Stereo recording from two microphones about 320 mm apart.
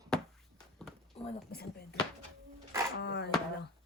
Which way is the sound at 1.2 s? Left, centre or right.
Left.